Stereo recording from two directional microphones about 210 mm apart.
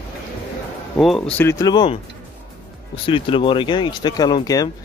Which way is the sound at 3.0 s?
25° left (ahead or behind).